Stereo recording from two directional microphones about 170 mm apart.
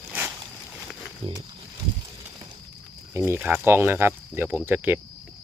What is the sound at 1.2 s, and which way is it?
Speech, 35° right (ahead or behind).